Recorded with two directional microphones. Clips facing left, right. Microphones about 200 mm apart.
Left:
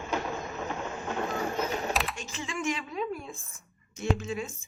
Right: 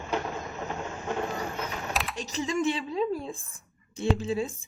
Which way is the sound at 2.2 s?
40° right (ahead or behind).